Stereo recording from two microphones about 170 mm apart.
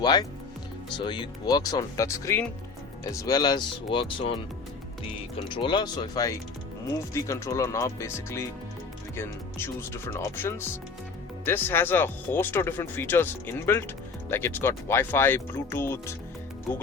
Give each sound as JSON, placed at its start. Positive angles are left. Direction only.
{"t": 0.0, "sound": "speech", "side_deg": 25}
{"t": 5.5, "sound": "speech", "side_deg": 30}